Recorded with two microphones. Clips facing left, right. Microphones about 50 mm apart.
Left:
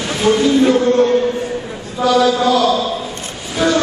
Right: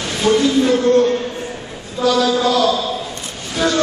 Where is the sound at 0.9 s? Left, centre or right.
Centre.